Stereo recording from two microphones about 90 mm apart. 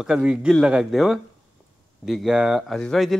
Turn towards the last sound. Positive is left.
turn(degrees=5)  # may be behind; listen again after turning